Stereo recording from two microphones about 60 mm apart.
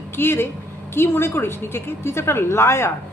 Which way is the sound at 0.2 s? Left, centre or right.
Left.